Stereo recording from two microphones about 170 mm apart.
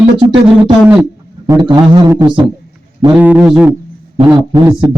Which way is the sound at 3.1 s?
10° right (ahead or behind).